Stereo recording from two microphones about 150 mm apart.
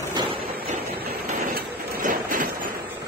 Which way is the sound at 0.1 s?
30° right (ahead or behind).